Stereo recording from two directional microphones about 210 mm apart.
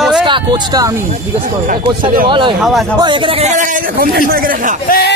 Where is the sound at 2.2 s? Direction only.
25° right (ahead or behind).